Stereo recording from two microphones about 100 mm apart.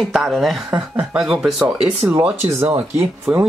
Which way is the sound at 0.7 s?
15° right (ahead or behind).